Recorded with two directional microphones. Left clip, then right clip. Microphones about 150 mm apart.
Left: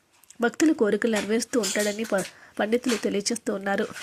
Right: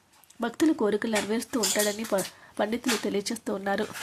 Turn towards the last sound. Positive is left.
turn(degrees=15)  # may be behind; listen again after turning